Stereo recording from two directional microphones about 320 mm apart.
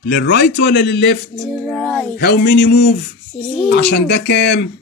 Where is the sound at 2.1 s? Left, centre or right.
Left.